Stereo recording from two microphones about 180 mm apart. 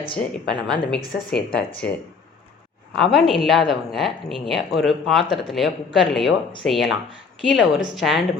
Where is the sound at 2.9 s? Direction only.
Centre (ahead or behind).